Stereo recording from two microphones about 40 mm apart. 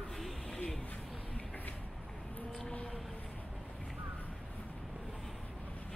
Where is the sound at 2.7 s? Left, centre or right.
Left.